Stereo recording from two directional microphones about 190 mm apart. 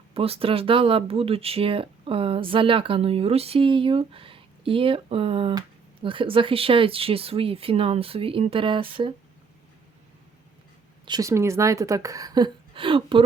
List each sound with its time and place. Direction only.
0.1 s speech: 30° right (ahead or behind)
11.0 s a woman's voice: 20° right (ahead or behind)